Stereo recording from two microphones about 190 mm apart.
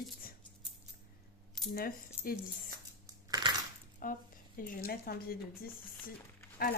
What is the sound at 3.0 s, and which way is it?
Coin, 20° right (ahead or behind).